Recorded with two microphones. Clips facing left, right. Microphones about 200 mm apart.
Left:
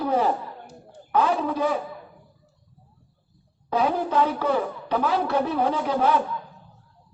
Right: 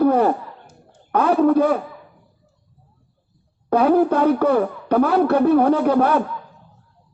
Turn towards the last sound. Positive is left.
turn(degrees=-60)  # may be behind; listen again after turning